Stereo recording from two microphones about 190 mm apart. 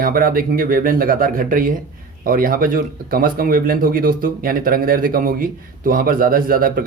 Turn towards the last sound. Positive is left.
turn(degrees=-50)  # may be behind; listen again after turning